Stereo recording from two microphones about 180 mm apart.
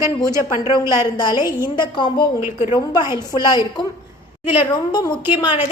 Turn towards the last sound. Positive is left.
turn(degrees=25)  # may be behind; listen again after turning